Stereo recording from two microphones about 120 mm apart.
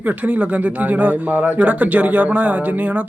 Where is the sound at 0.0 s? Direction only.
15° right (ahead or behind).